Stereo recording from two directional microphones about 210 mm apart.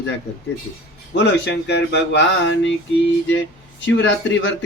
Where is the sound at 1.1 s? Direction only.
55° left (ahead or behind).